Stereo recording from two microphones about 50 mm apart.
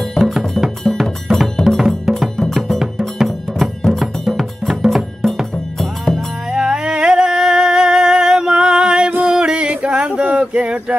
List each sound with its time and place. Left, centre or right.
0.2 s music: centre
6.5 s a sound: centre
9.3 s male singing: centre